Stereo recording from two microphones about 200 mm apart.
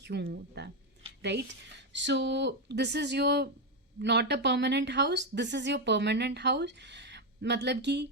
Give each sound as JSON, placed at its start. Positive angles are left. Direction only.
{"t": 0.0, "sound": "speech", "side_deg": -60}